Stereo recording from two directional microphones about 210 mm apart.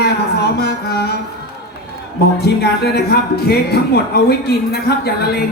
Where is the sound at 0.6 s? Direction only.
50° left (ahead or behind).